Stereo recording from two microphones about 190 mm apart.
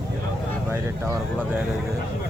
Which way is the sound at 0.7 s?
15° right (ahead or behind).